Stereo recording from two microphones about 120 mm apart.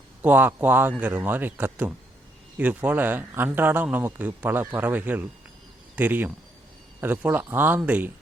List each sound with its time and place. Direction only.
0.2 s a man's voice: 15° right (ahead or behind)